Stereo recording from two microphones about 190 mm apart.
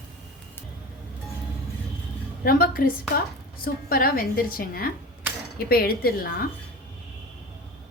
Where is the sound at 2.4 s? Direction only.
50° left (ahead or behind).